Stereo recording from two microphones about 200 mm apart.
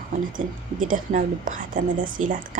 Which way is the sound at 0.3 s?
40° right (ahead or behind).